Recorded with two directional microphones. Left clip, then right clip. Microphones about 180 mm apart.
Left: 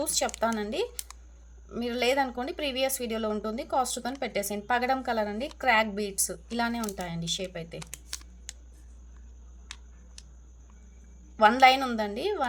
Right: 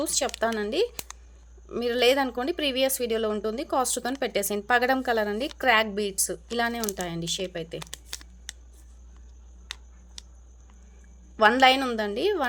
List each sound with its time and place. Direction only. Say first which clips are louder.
0.0 s speech: right 2 dB; 25° right (ahead or behind)
7.8 s computer keyboard: right 3 dB; 15° right (ahead or behind)
11.3 s speech: right 1 dB; 30° right (ahead or behind)